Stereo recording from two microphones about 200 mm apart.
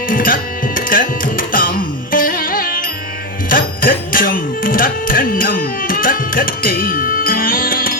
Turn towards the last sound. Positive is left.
turn(degrees=45)  # may be behind; listen again after turning